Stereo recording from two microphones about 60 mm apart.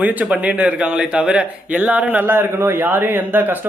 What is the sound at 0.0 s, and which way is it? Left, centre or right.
Speech, right.